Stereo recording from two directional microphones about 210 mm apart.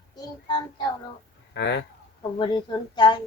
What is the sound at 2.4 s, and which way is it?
Speech, 20° left (ahead or behind).